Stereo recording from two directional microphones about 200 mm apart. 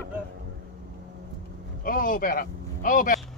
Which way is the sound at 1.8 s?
45° left (ahead or behind).